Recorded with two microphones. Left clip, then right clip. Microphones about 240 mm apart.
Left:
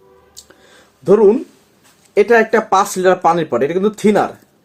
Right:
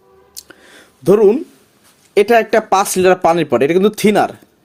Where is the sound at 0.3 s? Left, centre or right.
Right.